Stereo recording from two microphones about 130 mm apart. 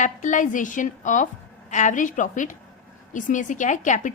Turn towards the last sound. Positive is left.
turn(degrees=75)  # may be behind; listen again after turning